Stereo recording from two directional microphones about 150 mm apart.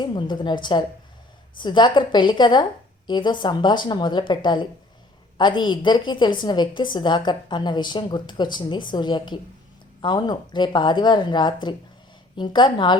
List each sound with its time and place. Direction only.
0.0 s a woman's voice: 30° left (ahead or behind)